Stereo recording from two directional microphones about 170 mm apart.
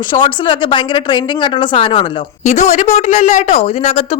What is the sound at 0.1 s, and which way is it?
Speech, 30° left (ahead or behind).